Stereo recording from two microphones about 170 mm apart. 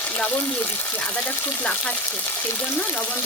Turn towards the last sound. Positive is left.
turn(degrees=10)  # may be behind; listen again after turning